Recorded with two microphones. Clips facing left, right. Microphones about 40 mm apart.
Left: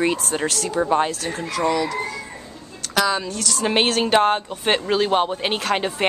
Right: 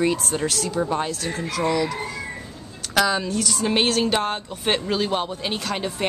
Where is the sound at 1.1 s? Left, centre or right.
Centre.